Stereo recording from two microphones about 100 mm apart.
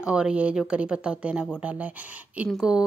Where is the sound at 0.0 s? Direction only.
10° right (ahead or behind).